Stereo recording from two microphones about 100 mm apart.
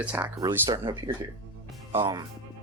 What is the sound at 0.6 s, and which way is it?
Speech, 50° right (ahead or behind).